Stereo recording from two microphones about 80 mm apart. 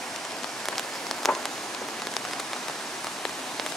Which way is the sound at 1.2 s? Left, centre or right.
Centre.